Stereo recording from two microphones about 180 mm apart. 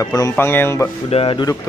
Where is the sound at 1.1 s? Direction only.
30° left (ahead or behind).